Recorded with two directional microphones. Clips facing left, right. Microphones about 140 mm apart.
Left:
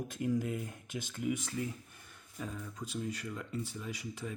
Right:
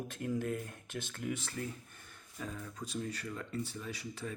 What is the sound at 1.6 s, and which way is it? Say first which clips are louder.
Speech: left 3 dB; 50° right (ahead or behind).